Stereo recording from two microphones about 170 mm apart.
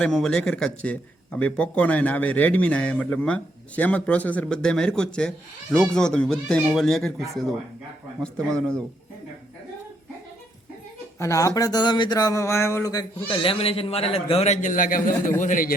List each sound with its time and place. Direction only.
0.0 s speech: 5° left (ahead or behind)
8.2 s speech: 5° left (ahead or behind)
11.2 s speech: 20° left (ahead or behind)
13.2 s a man's voice: 30° left (ahead or behind); by 15.7 s 50° left (ahead or behind)